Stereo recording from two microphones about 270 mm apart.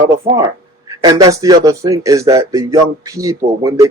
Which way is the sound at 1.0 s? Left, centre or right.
Centre.